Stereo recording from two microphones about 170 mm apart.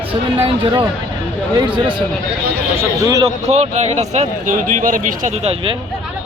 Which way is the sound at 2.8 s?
20° right (ahead or behind).